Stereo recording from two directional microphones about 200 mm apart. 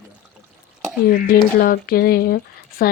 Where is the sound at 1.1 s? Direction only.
45° left (ahead or behind).